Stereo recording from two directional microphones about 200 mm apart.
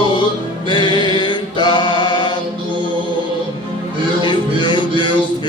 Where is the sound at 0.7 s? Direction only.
25° left (ahead or behind).